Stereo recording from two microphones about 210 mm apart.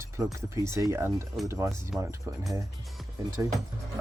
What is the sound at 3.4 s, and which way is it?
Speech, 15° right (ahead or behind).